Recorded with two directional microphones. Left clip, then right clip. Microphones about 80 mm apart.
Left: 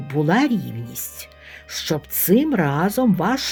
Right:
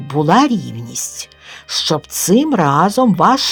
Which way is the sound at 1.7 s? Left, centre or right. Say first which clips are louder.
Right 8 dB; right.